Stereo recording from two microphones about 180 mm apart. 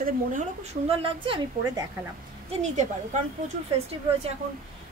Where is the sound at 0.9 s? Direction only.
30° right (ahead or behind).